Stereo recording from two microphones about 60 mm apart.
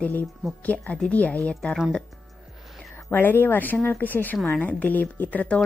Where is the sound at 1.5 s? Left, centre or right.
Centre.